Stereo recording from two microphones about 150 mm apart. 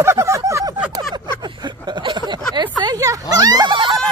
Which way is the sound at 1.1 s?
30° right (ahead or behind).